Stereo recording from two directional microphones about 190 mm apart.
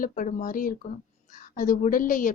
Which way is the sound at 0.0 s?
45° left (ahead or behind).